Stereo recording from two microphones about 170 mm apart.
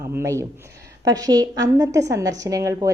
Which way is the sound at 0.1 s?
15° right (ahead or behind).